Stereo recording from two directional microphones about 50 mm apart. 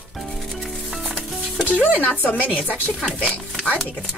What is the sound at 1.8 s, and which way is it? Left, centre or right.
Speech, left.